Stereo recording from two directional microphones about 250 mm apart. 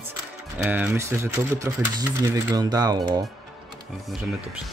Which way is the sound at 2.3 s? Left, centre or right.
Centre.